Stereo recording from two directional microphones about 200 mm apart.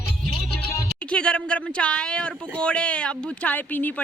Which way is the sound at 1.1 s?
5° left (ahead or behind).